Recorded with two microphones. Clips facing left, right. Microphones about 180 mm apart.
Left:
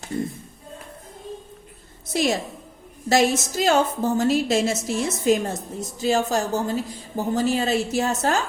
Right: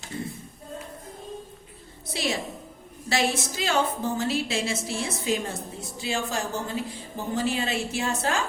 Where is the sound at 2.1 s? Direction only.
45° left (ahead or behind).